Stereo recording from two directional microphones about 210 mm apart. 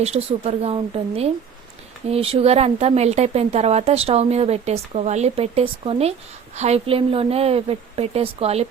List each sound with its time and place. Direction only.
0.0 s speech: 30° right (ahead or behind)